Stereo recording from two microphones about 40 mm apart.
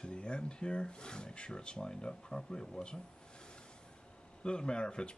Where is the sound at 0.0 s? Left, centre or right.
Left.